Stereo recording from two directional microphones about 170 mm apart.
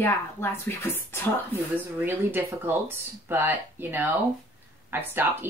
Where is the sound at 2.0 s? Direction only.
10° right (ahead or behind).